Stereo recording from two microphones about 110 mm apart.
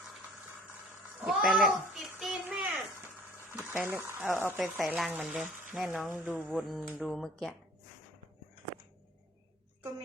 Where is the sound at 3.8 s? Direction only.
15° right (ahead or behind).